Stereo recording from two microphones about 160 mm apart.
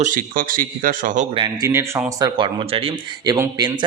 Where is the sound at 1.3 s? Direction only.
30° right (ahead or behind).